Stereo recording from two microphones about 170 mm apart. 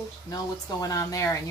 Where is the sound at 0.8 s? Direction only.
20° left (ahead or behind).